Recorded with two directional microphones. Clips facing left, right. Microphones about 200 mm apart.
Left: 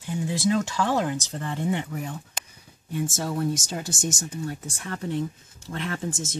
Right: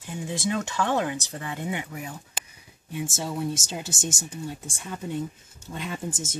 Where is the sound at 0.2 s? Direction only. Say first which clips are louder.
Left 4 dB; centre (ahead or behind).